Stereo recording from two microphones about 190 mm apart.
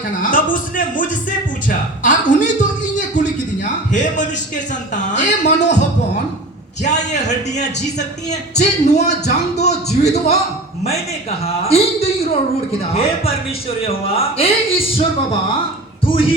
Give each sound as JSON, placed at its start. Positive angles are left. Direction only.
{"t": 0.2, "sound": "a sound", "side_deg": 45}
{"t": 5.1, "sound": "a man's voice", "side_deg": 40}
{"t": 6.8, "sound": "speech", "side_deg": 40}